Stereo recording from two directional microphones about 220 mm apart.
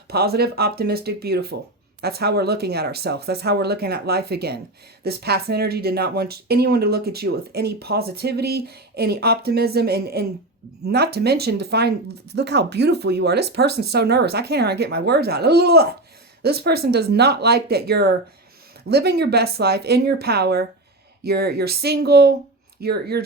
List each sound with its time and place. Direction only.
0.1 s speech: 45° right (ahead or behind)